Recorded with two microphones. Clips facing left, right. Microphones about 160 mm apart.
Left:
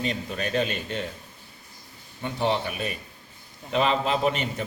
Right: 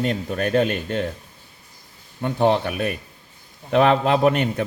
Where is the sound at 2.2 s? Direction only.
50° right (ahead or behind).